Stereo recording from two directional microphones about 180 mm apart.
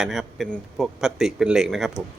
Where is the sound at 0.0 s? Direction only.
Centre (ahead or behind).